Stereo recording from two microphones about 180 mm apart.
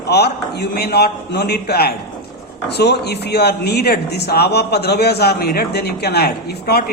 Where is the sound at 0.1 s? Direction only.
65° left (ahead or behind).